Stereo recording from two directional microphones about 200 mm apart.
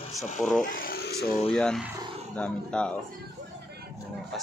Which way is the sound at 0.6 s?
45° left (ahead or behind).